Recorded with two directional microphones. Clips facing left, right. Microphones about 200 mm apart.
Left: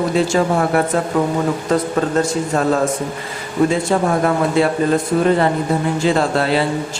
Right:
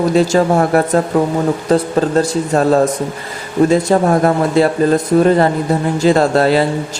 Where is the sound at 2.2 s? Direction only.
35° right (ahead or behind).